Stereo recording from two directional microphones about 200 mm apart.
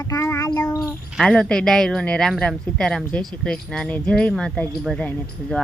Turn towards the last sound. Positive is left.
turn(degrees=5)  # may be behind; listen again after turning